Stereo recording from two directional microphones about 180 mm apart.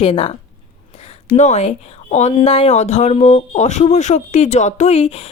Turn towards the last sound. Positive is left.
turn(degrees=35)  # may be behind; listen again after turning